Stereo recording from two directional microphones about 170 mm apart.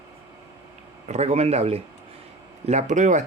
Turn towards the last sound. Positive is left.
turn(degrees=-45)  # may be behind; listen again after turning